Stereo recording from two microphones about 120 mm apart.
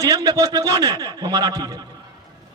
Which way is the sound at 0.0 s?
30° right (ahead or behind).